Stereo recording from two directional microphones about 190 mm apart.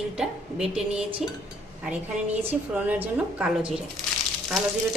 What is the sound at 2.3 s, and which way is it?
Speech, 30° right (ahead or behind).